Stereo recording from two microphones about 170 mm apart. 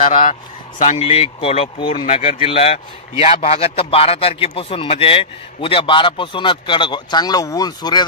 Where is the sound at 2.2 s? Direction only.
35° left (ahead or behind).